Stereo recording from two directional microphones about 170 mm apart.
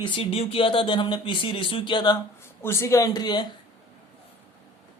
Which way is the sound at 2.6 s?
15° left (ahead or behind).